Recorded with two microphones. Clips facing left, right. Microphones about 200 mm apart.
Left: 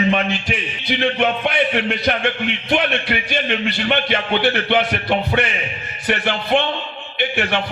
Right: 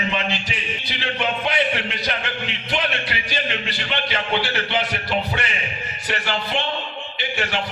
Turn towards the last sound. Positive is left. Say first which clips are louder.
# left 5 dB
turn(degrees=60)  # may be behind; listen again after turning